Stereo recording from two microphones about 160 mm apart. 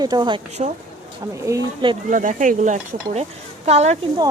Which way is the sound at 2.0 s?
55° right (ahead or behind).